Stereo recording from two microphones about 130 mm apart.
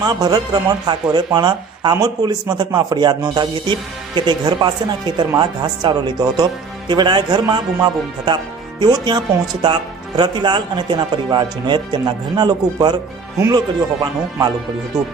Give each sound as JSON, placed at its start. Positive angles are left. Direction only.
{"t": 0.0, "sound": "speech", "side_deg": -30}
{"t": 14.0, "sound": "speech", "side_deg": -30}